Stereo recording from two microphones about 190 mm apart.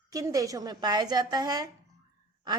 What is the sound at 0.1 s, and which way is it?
Speech, 20° right (ahead or behind).